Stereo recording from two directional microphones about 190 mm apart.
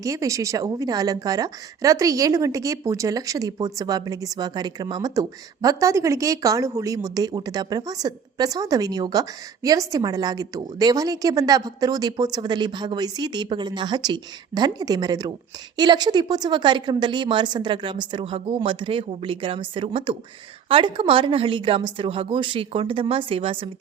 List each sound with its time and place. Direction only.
0.0 s a woman's voice: 15° right (ahead or behind)